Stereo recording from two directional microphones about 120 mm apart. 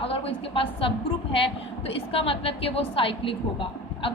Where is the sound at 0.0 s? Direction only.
50° left (ahead or behind).